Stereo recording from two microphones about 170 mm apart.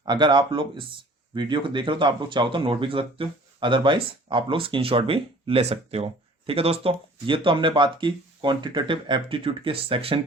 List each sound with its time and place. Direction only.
0.0 s speech: 25° right (ahead or behind)